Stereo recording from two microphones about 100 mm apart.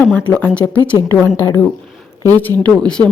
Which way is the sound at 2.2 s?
35° right (ahead or behind).